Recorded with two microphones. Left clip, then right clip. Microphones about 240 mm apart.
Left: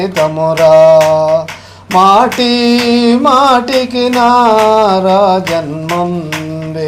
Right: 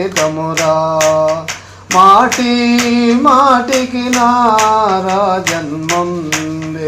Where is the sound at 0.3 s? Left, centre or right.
Left.